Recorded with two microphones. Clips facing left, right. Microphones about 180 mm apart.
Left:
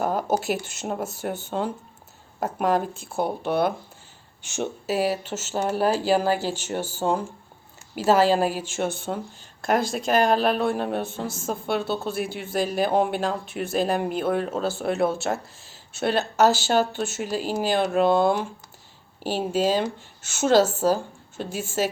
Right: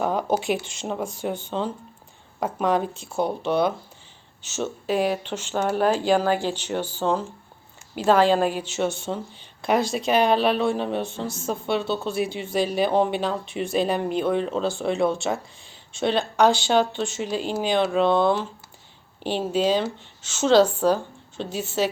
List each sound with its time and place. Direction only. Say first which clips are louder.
0.0 s a sound: right 1 dB; 5° left (ahead or behind)
0.6 s speech: even; 5° left (ahead or behind)
8.6 s speech: right 2 dB; 50° left (ahead or behind)
10.2 s speech: right 1 dB; centre (ahead or behind)
11.3 s speech: right 1 dB; 50° left (ahead or behind)
11.6 s speech: right 1 dB; 5° left (ahead or behind)